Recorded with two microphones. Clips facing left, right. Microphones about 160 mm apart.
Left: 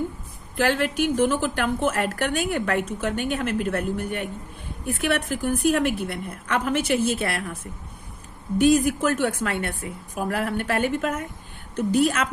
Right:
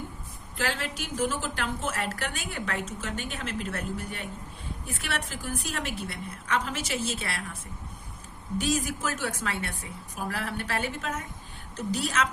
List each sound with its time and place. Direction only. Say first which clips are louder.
0.5 s a woman's voice: left 10 dB; 55° left (ahead or behind)
8.5 s a woman's voice: left 10 dB; 55° left (ahead or behind)